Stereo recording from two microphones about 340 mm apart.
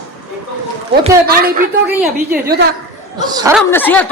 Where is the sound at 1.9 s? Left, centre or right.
Centre.